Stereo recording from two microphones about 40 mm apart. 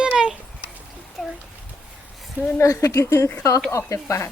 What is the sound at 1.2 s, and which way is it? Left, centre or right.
Speech, centre.